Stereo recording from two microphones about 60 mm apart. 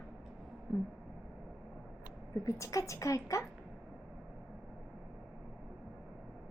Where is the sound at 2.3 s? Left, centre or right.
Left.